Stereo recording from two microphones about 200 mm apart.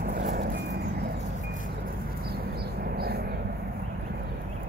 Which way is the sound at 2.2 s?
50° right (ahead or behind).